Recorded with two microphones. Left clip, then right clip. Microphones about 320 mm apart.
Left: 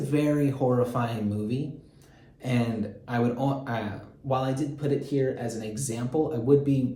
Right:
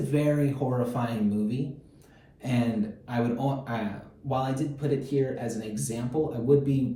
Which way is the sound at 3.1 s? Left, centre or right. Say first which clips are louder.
Left 2 dB; centre.